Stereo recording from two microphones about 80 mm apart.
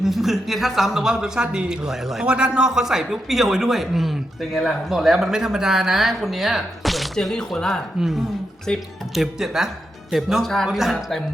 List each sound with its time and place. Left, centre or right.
0.0 s speech: centre